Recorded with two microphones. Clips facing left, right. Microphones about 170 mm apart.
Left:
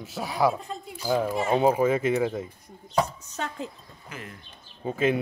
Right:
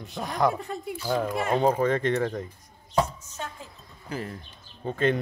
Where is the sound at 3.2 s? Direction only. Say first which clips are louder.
Left 5 dB; 70° left (ahead or behind).